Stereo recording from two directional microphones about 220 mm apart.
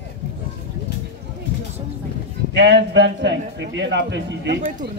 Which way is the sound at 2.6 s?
50° right (ahead or behind).